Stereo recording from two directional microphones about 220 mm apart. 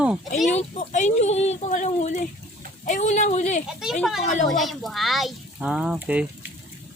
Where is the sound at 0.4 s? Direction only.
35° left (ahead or behind).